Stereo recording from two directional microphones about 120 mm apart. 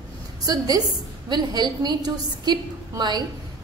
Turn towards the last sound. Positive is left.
turn(degrees=-35)  # may be behind; listen again after turning